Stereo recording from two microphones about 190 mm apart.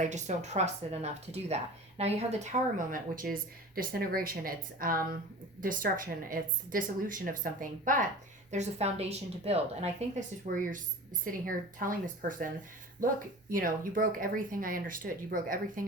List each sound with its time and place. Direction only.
0.0 s speech: 40° right (ahead or behind)